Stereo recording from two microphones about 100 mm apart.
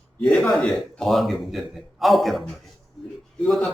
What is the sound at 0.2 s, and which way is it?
A man's voice, 5° left (ahead or behind).